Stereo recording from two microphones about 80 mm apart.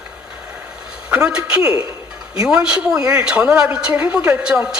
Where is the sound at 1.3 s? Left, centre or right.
Centre.